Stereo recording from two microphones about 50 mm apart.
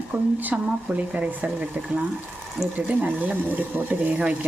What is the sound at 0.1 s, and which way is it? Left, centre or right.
Speech, right.